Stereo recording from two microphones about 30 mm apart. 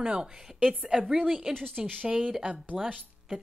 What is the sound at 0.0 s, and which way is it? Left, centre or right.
A woman's voice, right.